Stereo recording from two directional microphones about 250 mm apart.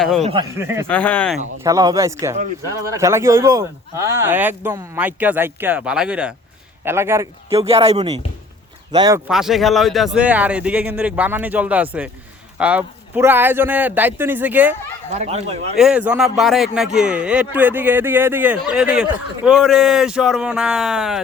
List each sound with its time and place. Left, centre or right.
0.0 s speech: centre
0.6 s speech: centre
0.9 s speech: centre
1.6 s speech: centre
7.5 s speech: right; by 14.8 s centre
15.1 s speech: right
15.8 s speech: centre